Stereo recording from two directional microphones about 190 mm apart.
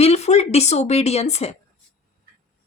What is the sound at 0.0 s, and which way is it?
Speech, 35° left (ahead or behind).